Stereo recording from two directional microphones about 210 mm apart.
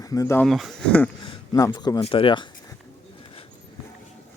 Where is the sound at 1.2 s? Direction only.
20° left (ahead or behind).